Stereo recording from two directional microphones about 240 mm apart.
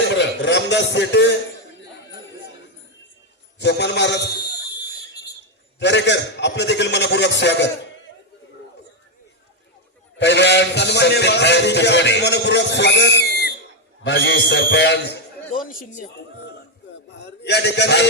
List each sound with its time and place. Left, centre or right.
0.1 s a sound: left
3.6 s a man's voice: left
5.8 s a man's voice: left
10.2 s a man's voice: left
17.1 s a man's voice: left